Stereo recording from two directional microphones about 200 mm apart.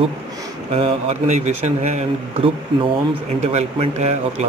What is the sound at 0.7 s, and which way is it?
Speech, 30° right (ahead or behind).